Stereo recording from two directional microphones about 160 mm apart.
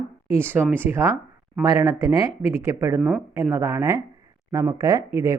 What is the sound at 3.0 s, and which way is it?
Speech, 5° right (ahead or behind).